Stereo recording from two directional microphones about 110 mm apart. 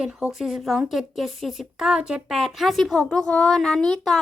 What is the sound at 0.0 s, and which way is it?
A woman's voice, 10° right (ahead or behind).